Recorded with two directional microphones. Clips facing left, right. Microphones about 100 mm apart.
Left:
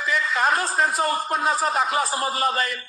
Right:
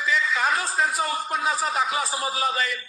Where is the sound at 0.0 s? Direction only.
45° left (ahead or behind).